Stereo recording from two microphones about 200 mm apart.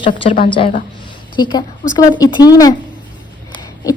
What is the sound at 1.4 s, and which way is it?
A woman's voice, 20° left (ahead or behind).